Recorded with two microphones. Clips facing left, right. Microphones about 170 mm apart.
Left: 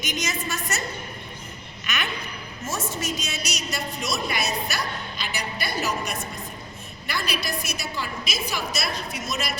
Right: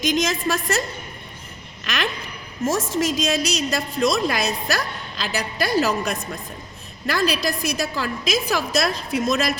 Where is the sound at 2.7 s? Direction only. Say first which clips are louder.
Right 8 dB; 90° right.